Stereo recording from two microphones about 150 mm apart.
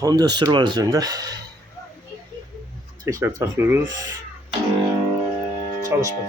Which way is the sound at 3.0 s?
20° right (ahead or behind).